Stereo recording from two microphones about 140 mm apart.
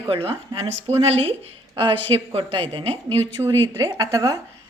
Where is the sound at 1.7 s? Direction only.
40° right (ahead or behind).